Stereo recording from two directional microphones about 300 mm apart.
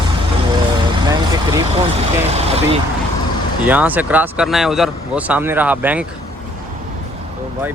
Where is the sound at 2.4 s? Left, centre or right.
Right.